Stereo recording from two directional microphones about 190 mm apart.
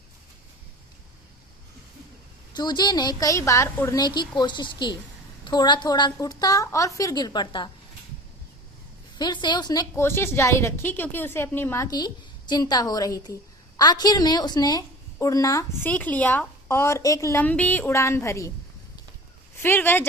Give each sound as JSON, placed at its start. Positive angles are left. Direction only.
{"t": 2.6, "sound": "a woman's voice", "side_deg": 20}
{"t": 9.1, "sound": "a woman's voice", "side_deg": 25}
{"t": 19.5, "sound": "a woman's voice", "side_deg": 10}